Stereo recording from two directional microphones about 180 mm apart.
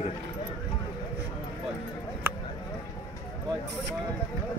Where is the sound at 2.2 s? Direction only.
10° right (ahead or behind).